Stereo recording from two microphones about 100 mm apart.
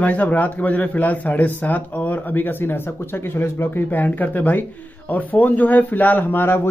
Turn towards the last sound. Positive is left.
turn(degrees=20)  # may be behind; listen again after turning